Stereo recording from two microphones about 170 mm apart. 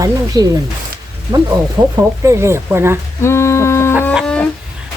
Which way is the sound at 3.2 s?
15° left (ahead or behind).